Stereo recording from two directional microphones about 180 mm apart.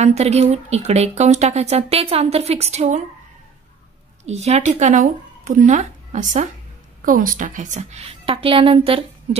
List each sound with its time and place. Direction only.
0.0 s speech: 35° right (ahead or behind)
4.2 s speech: 35° right (ahead or behind)